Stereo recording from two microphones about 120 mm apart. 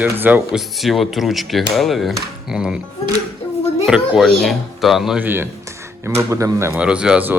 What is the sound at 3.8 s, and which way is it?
Speech, 5° right (ahead or behind).